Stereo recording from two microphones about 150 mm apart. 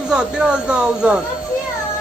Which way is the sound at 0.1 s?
5° right (ahead or behind).